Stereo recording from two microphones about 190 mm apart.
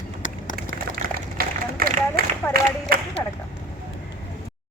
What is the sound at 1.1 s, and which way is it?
Run, 50° right (ahead or behind).